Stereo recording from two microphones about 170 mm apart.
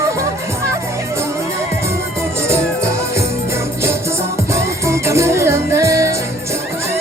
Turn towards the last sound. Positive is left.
turn(degrees=-15)  # may be behind; listen again after turning